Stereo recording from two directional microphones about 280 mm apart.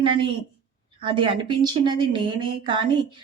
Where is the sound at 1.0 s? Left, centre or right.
Centre.